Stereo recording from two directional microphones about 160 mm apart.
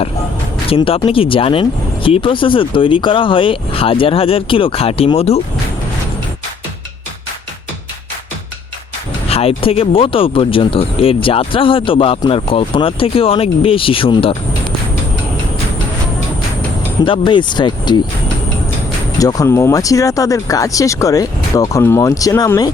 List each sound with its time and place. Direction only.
0.7 s speech: 35° left (ahead or behind)
9.3 s speech: 35° left (ahead or behind)
17.1 s speech: 30° left (ahead or behind)
19.2 s speech: 20° left (ahead or behind)